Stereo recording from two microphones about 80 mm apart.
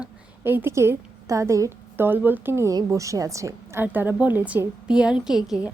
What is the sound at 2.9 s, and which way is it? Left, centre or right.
Speech, right.